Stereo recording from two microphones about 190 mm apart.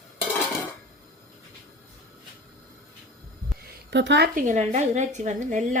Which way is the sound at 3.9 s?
65° right (ahead or behind).